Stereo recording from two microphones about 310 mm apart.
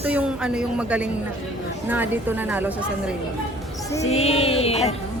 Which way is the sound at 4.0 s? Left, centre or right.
Left.